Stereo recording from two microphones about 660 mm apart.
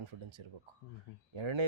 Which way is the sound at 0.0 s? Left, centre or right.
Right.